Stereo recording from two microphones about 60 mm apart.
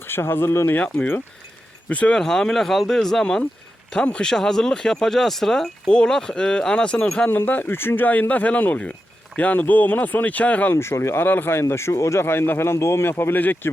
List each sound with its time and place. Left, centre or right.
0.1 s speech: left
0.7 s speech: left
2.2 s speech: centre
7.3 s speech: left
10.8 s speech: left
11.7 s speech: left